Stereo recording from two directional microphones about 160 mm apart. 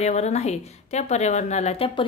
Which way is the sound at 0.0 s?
45° left (ahead or behind).